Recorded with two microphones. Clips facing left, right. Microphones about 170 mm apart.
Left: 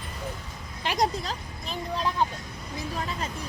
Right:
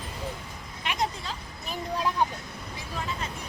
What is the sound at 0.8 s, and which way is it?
Speech, 35° left (ahead or behind).